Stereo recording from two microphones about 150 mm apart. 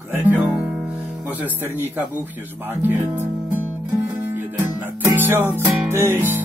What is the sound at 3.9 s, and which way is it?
Music, 15° right (ahead or behind).